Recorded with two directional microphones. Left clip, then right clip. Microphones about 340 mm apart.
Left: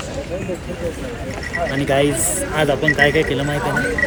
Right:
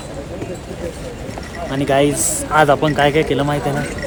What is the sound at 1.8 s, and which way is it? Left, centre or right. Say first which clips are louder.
Speech: right 4 dB; centre.